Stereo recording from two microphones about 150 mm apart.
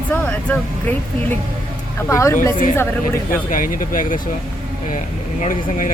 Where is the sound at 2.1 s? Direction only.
20° left (ahead or behind).